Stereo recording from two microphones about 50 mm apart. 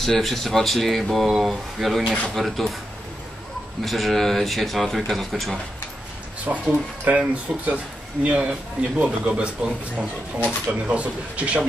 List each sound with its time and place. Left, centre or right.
0.0 s speech: centre
3.8 s speech: centre
6.5 s speech: right